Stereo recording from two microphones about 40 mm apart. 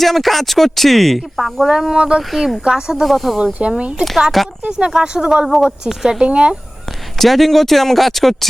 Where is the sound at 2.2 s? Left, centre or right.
Centre.